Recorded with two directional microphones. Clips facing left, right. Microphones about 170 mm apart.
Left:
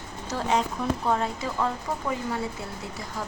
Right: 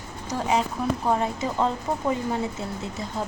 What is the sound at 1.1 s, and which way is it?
Speech, 20° right (ahead or behind).